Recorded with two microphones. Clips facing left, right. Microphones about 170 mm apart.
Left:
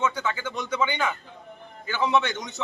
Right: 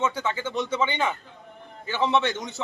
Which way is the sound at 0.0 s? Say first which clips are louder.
Even; 25° right (ahead or behind).